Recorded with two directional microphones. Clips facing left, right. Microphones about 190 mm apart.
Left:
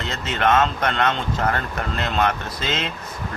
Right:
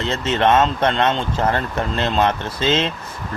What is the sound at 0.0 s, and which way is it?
Speech, 30° right (ahead or behind).